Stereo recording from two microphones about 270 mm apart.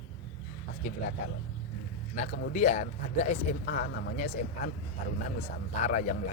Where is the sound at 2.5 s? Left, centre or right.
Left.